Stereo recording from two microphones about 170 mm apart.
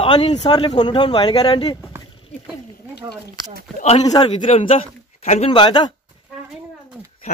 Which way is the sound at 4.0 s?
25° left (ahead or behind).